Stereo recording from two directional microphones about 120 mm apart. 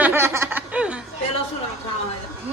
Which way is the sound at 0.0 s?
20° right (ahead or behind).